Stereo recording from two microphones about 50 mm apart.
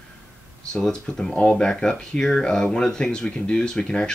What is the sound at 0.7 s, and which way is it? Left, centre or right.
Speech, centre.